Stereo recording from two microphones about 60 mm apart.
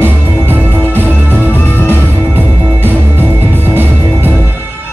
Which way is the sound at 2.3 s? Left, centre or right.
Right.